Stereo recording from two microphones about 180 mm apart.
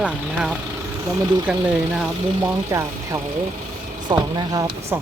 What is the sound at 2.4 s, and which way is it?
Speech, 15° right (ahead or behind).